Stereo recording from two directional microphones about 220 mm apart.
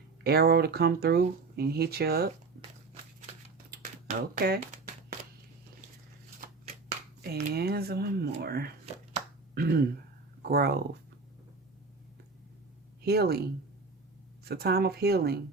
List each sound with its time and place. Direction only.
0.3 s speech: 45° right (ahead or behind)
3.7 s a sound: 45° right (ahead or behind)
6.4 s shuffling cards: 30° right (ahead or behind)
7.2 s speech: 45° right (ahead or behind)
13.0 s speech: 45° right (ahead or behind)
14.4 s speech: 45° right (ahead or behind)